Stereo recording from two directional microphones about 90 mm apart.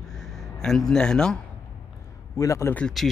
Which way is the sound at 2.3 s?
35° left (ahead or behind).